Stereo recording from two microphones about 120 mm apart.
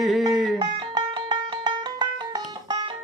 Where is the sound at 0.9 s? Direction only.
40° right (ahead or behind).